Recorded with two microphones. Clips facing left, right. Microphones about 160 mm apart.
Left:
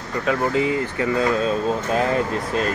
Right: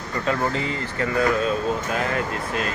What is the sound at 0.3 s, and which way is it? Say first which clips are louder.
Speech: left 4 dB; 10° left (ahead or behind).